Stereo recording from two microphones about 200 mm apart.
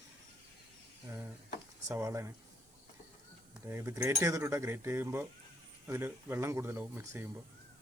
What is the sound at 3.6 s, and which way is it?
Speech, 10° right (ahead or behind).